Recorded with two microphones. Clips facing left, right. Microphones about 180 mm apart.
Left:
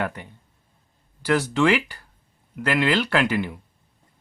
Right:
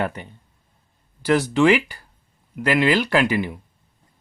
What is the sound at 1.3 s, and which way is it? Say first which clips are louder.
Speech: right 3 dB; 15° right (ahead or behind).